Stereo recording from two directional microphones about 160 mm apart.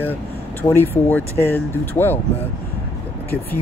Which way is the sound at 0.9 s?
15° left (ahead or behind).